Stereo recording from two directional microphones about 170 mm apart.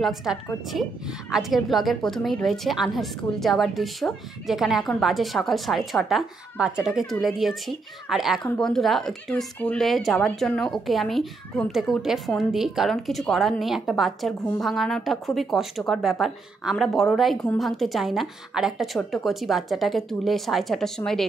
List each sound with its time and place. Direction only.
0.0 s a woman's voice: centre (ahead or behind)